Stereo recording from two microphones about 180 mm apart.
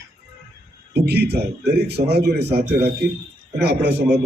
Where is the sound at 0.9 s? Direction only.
65° right (ahead or behind).